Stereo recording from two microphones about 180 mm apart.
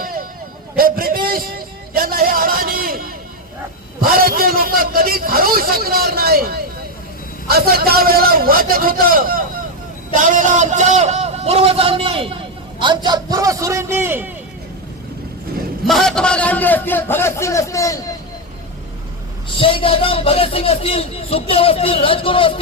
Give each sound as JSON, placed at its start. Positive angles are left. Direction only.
{"t": 0.0, "sound": "a sound", "side_deg": -55}
{"t": 4.0, "sound": "a man's voice", "side_deg": -55}
{"t": 15.9, "sound": "a man's voice", "side_deg": 5}
{"t": 19.5, "sound": "speech", "side_deg": 30}